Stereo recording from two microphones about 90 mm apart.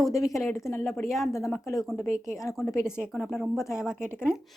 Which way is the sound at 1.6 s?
40° left (ahead or behind).